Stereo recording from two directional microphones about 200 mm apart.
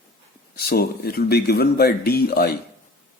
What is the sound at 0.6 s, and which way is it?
Speech, 50° left (ahead or behind).